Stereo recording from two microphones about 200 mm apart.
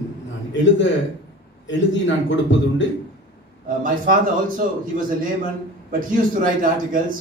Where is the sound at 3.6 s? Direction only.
45° right (ahead or behind).